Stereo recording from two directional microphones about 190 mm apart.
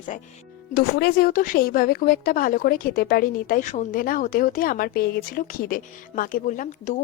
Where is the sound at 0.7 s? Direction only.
60° left (ahead or behind).